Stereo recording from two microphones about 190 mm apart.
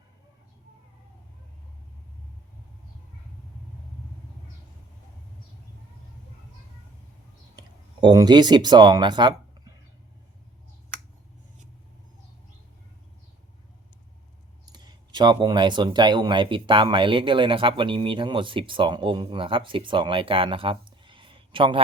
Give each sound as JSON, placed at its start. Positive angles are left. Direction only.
{"t": 8.0, "sound": "speech", "side_deg": -20}
{"t": 14.7, "sound": "speech", "side_deg": -20}